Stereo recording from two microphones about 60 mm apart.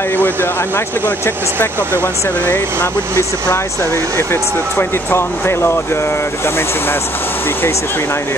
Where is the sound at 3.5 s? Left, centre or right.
Left.